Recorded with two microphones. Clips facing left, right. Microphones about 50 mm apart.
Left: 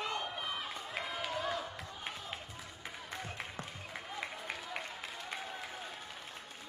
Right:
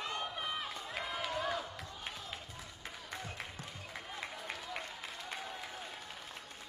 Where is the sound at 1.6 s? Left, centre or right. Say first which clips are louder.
Left 2 dB; left.